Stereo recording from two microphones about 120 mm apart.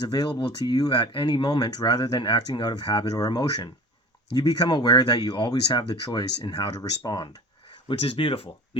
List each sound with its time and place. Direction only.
0.0 s speech: 35° left (ahead or behind)
7.9 s speech: 50° left (ahead or behind)